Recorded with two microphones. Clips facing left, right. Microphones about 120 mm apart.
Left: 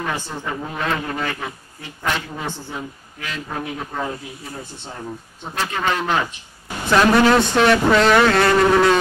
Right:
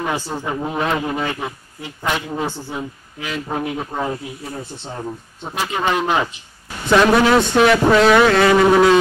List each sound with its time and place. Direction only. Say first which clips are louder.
0.0 s a man's voice: right 3 dB; 15° right (ahead or behind)
5.4 s a man's voice: right 2 dB; 15° right (ahead or behind)
6.9 s a man's voice: right 1 dB; 5° right (ahead or behind)